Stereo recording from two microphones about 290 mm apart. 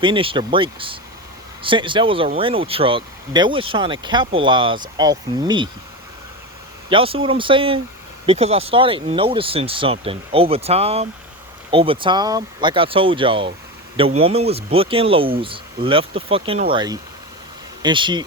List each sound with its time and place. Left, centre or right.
0.0 s speech: centre
6.9 s speech: centre